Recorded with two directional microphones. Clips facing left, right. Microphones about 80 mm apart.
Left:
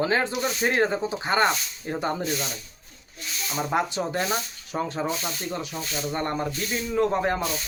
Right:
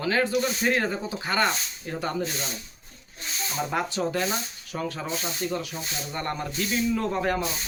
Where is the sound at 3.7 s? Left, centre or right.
Left.